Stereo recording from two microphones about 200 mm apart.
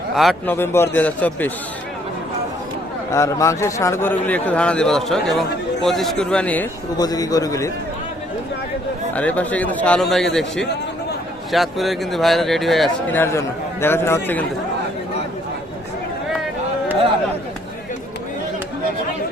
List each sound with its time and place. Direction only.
0.2 s speech: centre (ahead or behind)
0.5 s a man's voice: 10° left (ahead or behind)
3.1 s a man's voice: 15° left (ahead or behind)
6.9 s a man's voice: 20° left (ahead or behind)
9.1 s a man's voice: 5° left (ahead or behind)